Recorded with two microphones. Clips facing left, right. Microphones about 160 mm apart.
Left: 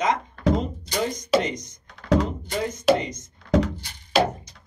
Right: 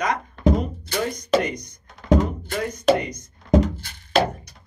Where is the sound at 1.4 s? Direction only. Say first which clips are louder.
Even; 60° right (ahead or behind).